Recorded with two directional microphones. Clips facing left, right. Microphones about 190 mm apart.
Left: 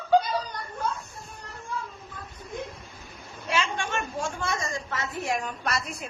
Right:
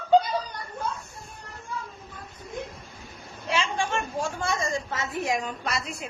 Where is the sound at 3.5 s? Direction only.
30° right (ahead or behind).